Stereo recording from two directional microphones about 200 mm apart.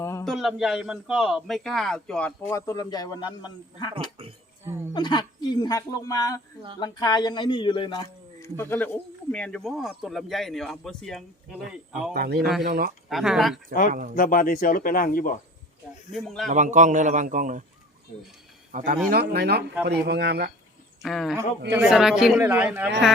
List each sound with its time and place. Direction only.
0.0 s a sound: 15° left (ahead or behind)
0.3 s a man's voice: centre (ahead or behind); by 3.9 s 20° left (ahead or behind)
4.6 s speech: 10° right (ahead or behind)
4.9 s speech: 20° left (ahead or behind)
8.4 s a man's voice: 10° left (ahead or behind)
12.1 s speech: 50° right (ahead or behind)
12.4 s a man's voice: centre (ahead or behind)
12.6 s speech: 50° right (ahead or behind)
13.1 s a man's voice: centre (ahead or behind)
14.2 s speech: 45° left (ahead or behind)
16.1 s a man's voice: centre (ahead or behind)
16.5 s a man's voice: 40° right (ahead or behind)
18.7 s speech: 40° right (ahead or behind)
21.0 s a man's voice: centre (ahead or behind)